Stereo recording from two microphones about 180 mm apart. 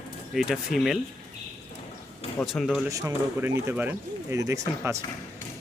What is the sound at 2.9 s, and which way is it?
Speech, 20° right (ahead or behind).